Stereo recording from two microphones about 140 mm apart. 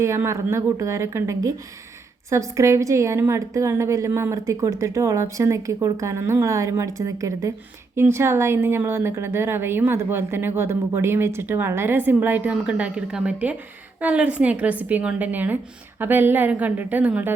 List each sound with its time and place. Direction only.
0.0 s a woman's voice: 20° right (ahead or behind)